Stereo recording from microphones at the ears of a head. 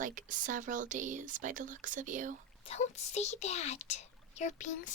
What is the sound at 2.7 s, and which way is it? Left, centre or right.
A child's voice, left.